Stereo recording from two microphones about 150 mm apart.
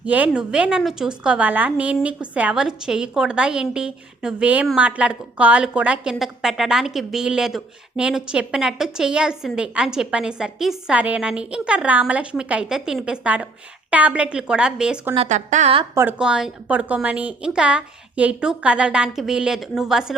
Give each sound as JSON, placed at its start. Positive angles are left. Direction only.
{"t": 0.0, "sound": "a woman's voice", "side_deg": -10}
{"t": 15.1, "sound": "a woman's voice", "side_deg": -45}
{"t": 16.0, "sound": "a woman's voice", "side_deg": -10}